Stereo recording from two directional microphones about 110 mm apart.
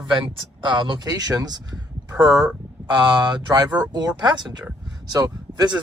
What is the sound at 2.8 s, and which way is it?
Speech, 40° right (ahead or behind).